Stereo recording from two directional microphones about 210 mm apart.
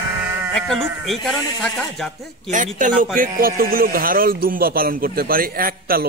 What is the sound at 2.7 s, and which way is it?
Speech, 40° right (ahead or behind).